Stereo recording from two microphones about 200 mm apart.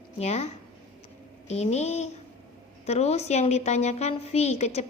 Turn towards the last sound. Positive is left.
turn(degrees=35)  # may be behind; listen again after turning